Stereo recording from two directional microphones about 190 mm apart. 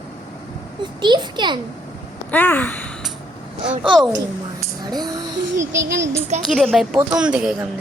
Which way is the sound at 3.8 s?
5° right (ahead or behind).